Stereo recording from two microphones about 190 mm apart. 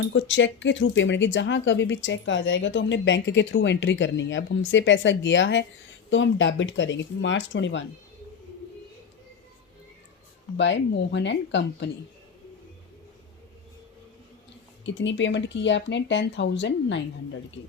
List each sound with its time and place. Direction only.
0.1 s speech: 75° left (ahead or behind)
10.6 s speech: 70° left (ahead or behind)
14.8 s speech: 70° left (ahead or behind)